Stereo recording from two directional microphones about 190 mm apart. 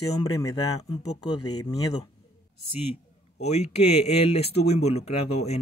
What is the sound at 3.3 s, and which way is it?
Speech, 35° left (ahead or behind).